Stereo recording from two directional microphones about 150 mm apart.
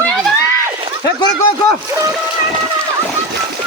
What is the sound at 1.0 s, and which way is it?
Speech, 30° left (ahead or behind).